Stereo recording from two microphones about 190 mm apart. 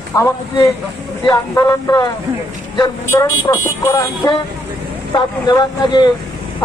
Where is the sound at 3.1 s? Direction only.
15° left (ahead or behind).